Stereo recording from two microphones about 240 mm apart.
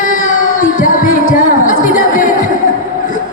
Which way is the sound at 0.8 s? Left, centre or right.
Left.